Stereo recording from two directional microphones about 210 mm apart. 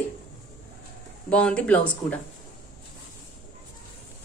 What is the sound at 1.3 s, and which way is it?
Speech, 5° left (ahead or behind).